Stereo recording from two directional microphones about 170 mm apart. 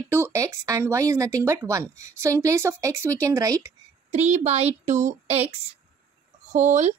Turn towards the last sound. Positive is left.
turn(degrees=-45)  # may be behind; listen again after turning